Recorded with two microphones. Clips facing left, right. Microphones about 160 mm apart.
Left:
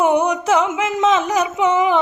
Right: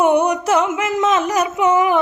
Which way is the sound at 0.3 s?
90° left.